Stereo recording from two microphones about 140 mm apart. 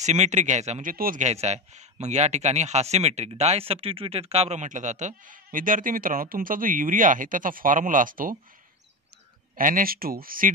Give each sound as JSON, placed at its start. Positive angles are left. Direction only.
{"t": 0.0, "sound": "speech", "side_deg": -55}
{"t": 0.8, "sound": "speech", "side_deg": -80}
{"t": 9.6, "sound": "speech", "side_deg": -80}